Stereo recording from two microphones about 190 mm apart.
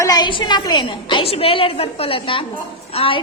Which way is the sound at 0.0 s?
20° left (ahead or behind).